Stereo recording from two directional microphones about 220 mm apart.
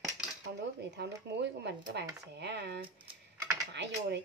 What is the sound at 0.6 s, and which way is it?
Speech, 50° right (ahead or behind).